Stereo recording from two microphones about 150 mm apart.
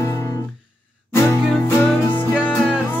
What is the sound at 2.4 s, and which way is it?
Music, 10° left (ahead or behind).